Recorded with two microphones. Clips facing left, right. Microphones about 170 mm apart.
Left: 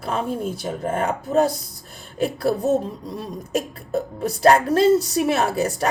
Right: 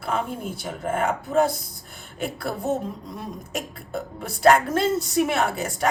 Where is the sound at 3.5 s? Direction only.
35° left (ahead or behind).